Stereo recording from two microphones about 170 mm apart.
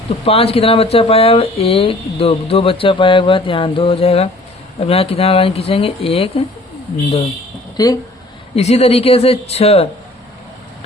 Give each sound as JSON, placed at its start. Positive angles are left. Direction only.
{"t": 0.3, "sound": "speech", "side_deg": 35}
{"t": 7.8, "sound": "speech", "side_deg": 25}
{"t": 8.5, "sound": "speech", "side_deg": 40}